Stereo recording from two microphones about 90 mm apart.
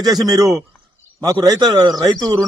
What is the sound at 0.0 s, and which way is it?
A man's voice, 45° right (ahead or behind).